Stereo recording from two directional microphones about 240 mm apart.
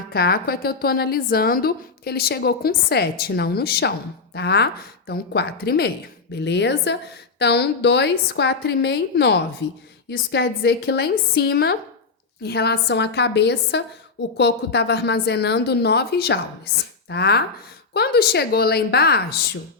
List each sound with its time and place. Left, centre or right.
0.1 s a woman's voice: left